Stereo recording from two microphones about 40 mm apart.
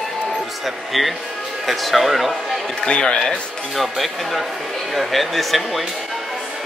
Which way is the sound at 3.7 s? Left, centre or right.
Centre.